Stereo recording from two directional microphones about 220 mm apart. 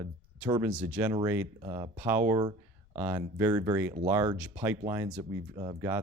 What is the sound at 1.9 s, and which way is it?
Speech, 10° right (ahead or behind).